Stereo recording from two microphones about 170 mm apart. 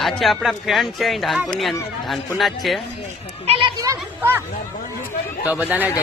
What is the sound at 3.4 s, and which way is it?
Children playing, 30° right (ahead or behind).